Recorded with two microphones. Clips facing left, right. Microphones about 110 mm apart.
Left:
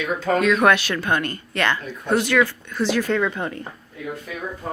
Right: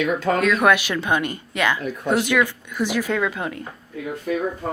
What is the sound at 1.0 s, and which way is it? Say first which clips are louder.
Speech: right 1 dB; 15° right (ahead or behind).